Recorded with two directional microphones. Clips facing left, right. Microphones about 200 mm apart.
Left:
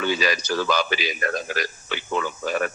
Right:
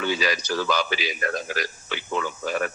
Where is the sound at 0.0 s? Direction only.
50° left (ahead or behind).